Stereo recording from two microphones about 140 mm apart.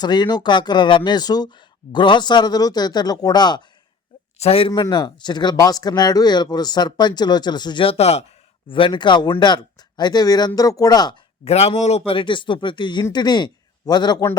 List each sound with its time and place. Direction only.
0.0 s speech: 30° left (ahead or behind)
4.4 s speech: 45° left (ahead or behind); by 11.1 s 30° left (ahead or behind)
11.4 s speech: 50° left (ahead or behind); by 14.3 s 30° left (ahead or behind)